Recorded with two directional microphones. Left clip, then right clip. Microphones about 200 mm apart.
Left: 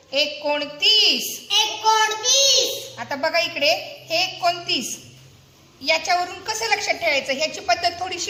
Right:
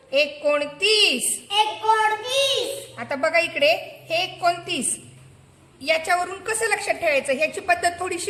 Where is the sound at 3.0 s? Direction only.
50° right (ahead or behind).